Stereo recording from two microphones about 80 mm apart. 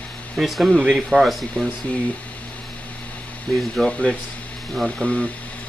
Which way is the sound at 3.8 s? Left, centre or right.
Centre.